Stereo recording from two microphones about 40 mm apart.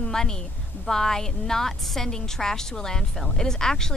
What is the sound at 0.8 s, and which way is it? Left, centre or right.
Speech, centre.